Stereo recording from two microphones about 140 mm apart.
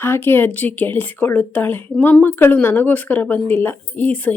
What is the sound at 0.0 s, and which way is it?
Speech, 15° left (ahead or behind).